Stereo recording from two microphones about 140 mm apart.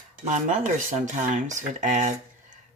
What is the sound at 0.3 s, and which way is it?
Rub, 60° right (ahead or behind).